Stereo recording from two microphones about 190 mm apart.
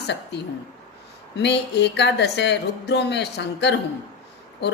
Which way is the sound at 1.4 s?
65° left (ahead or behind).